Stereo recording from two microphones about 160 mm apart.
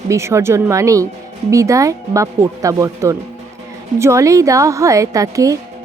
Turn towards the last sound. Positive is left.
turn(degrees=-20)  # may be behind; listen again after turning